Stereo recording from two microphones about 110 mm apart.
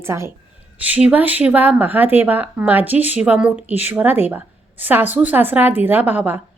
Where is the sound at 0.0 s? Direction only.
25° right (ahead or behind).